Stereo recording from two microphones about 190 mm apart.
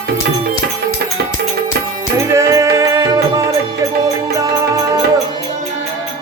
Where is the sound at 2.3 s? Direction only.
15° right (ahead or behind).